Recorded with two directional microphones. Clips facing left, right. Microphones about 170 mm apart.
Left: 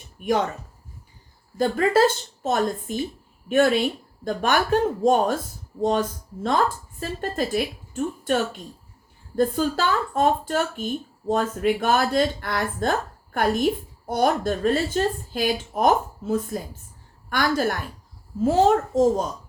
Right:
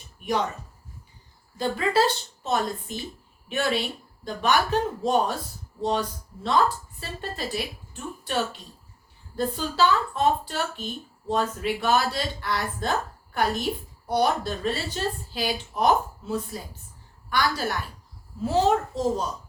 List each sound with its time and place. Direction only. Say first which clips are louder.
0.2 s speech: left 5 dB; 50° left (ahead or behind)
1.5 s speech: left 4 dB; 50° left (ahead or behind)